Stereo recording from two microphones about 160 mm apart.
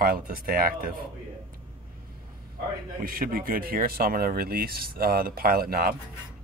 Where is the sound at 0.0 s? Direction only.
65° right (ahead or behind).